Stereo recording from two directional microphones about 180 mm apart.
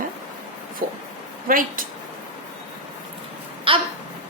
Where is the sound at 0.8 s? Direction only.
50° right (ahead or behind).